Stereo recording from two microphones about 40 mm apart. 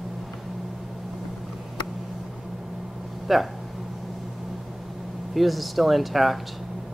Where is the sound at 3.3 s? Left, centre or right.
Centre.